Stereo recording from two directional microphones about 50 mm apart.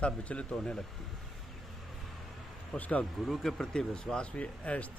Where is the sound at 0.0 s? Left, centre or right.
Left.